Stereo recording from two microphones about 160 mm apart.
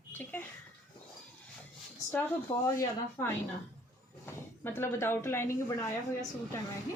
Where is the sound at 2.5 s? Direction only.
20° left (ahead or behind).